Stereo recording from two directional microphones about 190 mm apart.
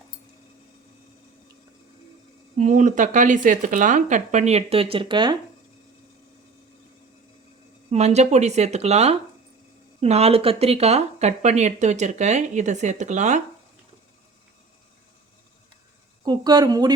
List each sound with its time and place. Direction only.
2.6 s speech: 40° right (ahead or behind)
7.9 s speech: 35° right (ahead or behind)
16.2 s a woman's voice: 20° right (ahead or behind)